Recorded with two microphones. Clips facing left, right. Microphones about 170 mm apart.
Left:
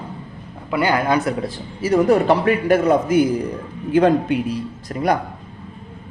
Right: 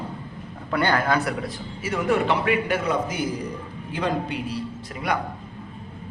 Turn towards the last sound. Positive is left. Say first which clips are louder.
# left 8 dB
turn(degrees=40)  # may be behind; listen again after turning